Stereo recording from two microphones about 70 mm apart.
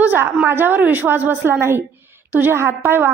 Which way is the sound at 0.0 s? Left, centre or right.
Right.